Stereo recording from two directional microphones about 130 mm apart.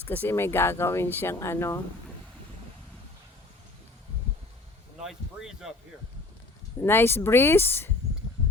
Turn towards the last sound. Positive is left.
turn(degrees=15)  # may be behind; listen again after turning